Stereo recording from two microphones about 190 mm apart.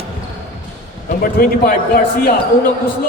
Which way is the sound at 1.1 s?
50° left (ahead or behind).